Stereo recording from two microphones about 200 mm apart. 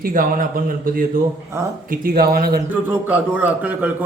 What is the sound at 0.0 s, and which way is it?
Speech, 45° right (ahead or behind).